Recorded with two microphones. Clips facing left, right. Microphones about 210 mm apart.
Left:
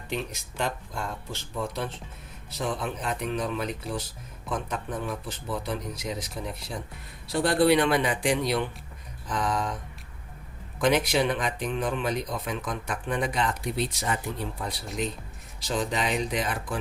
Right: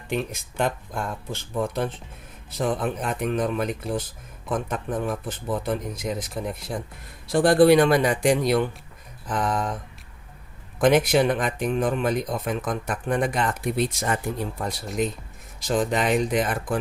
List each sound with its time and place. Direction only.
0.1 s speech: 50° right (ahead or behind)
10.8 s speech: 50° right (ahead or behind)